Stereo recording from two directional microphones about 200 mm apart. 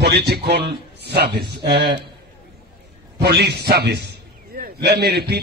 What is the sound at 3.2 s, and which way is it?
A man's voice, 55° right (ahead or behind).